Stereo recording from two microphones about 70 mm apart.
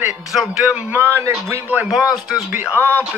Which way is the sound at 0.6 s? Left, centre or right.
Centre.